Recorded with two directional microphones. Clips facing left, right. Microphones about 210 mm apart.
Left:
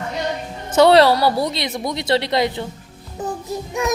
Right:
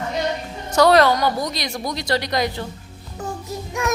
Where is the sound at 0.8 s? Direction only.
30° left (ahead or behind).